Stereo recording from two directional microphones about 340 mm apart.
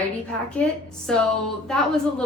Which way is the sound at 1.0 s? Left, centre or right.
Centre.